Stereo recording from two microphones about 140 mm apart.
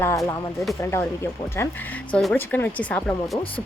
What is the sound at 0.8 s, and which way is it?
Speech, 20° left (ahead or behind).